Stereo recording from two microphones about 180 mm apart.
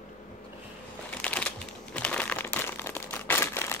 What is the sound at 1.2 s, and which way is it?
Crumpling, 5° left (ahead or behind).